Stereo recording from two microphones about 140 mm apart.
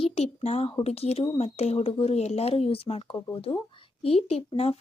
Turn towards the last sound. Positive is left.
turn(degrees=45)  # may be behind; listen again after turning